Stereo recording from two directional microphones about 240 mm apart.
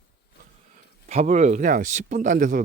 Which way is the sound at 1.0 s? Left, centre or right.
Right.